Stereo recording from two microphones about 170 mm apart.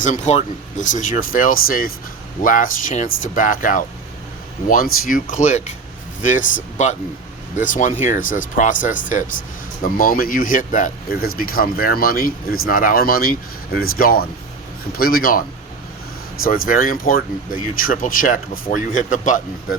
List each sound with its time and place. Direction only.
0.0 s speech: 45° left (ahead or behind)